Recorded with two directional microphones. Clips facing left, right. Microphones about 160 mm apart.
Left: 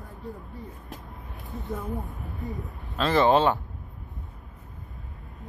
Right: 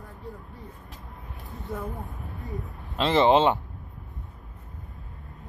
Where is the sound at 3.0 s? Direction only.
20° right (ahead or behind).